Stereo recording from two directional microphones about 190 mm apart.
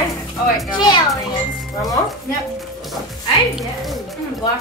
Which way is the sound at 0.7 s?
20° left (ahead or behind).